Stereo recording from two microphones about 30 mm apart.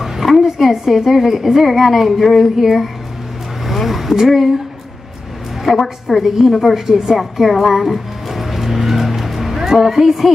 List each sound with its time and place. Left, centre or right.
0.0 s a sound: centre
0.5 s a woman's voice: centre
3.7 s vehicle: centre
4.3 s a woman's voice: centre
5.7 s a woman's voice: centre
6.9 s a woman's voice: centre
7.2 s music: centre
9.6 s a woman's voice: centre